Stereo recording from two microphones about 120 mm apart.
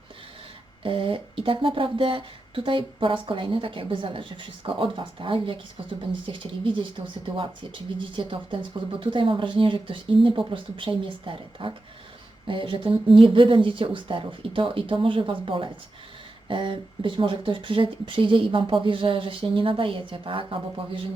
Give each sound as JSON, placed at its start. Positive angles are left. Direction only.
{"t": 0.8, "sound": "speech", "side_deg": -45}